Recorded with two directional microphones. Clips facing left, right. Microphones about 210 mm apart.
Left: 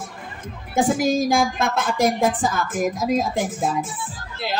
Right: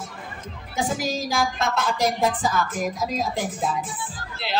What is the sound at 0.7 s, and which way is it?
A woman's voice, 50° left (ahead or behind).